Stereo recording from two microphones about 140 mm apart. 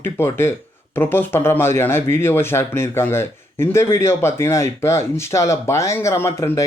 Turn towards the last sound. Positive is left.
turn(degrees=20)  # may be behind; listen again after turning